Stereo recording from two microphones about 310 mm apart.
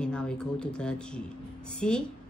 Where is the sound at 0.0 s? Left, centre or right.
Centre.